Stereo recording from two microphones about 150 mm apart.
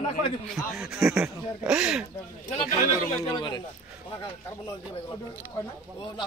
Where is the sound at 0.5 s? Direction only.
5° right (ahead or behind).